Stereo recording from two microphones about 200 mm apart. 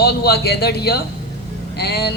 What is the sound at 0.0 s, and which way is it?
A man's voice, 55° left (ahead or behind).